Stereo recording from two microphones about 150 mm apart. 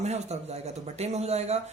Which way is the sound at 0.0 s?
50° right (ahead or behind).